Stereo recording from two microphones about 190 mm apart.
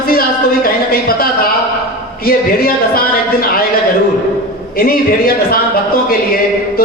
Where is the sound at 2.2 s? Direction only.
50° left (ahead or behind).